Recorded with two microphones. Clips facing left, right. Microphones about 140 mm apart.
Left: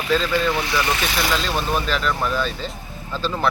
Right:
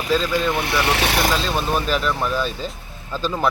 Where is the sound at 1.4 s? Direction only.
Centre (ahead or behind).